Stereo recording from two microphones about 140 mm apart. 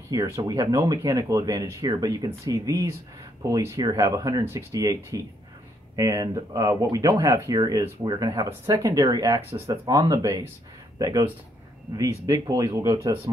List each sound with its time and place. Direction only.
0.1 s speech: 25° right (ahead or behind)